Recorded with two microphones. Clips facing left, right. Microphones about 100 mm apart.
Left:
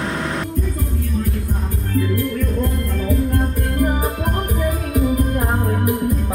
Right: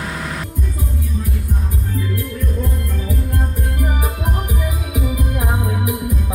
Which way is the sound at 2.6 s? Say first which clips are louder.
Left 3 dB; 5° right (ahead or behind).